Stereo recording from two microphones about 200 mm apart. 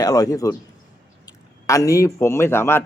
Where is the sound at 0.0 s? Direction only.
15° left (ahead or behind).